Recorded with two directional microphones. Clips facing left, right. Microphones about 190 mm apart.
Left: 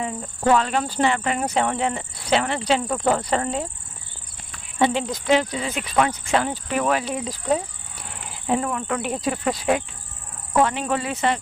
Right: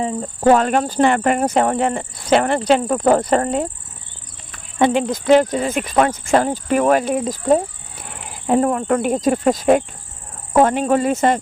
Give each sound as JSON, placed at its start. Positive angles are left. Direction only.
{"t": 0.0, "sound": "speech", "side_deg": -30}
{"t": 0.5, "sound": "speech", "side_deg": -50}
{"t": 4.8, "sound": "speech", "side_deg": -50}